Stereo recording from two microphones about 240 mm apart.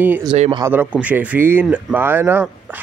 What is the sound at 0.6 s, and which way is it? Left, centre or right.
Speech, centre.